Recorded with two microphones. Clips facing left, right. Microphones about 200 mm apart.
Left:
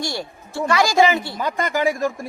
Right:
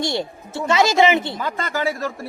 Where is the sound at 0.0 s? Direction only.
20° right (ahead or behind).